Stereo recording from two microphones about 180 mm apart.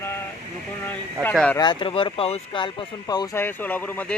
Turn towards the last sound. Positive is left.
turn(degrees=10)  # may be behind; listen again after turning